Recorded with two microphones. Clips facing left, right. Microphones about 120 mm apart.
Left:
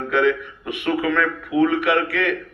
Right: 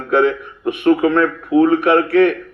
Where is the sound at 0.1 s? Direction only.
35° right (ahead or behind).